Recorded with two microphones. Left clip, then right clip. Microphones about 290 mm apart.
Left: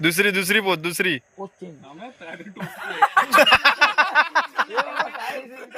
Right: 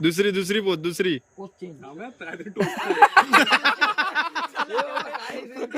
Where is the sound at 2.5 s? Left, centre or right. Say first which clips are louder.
Right 9 dB; right.